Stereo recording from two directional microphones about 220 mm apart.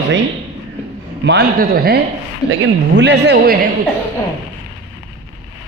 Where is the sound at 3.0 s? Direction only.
50° right (ahead or behind).